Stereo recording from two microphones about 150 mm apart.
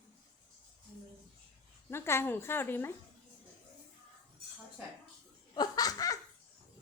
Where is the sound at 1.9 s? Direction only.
15° left (ahead or behind).